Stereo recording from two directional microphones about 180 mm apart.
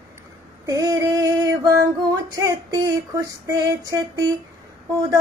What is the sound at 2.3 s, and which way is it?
Speech, 15° right (ahead or behind).